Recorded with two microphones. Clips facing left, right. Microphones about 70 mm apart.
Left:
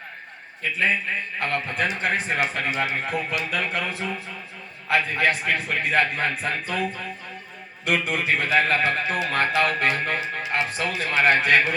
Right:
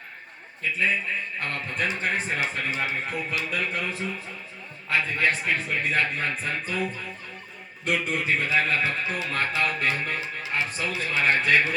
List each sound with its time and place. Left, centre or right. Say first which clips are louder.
0.6 s a man's voice: left 2 dB; left
7.9 s a man's voice: left 2 dB; left